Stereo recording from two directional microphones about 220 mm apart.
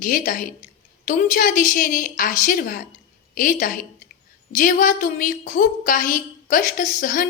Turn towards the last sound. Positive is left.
turn(degrees=35)  # may be behind; listen again after turning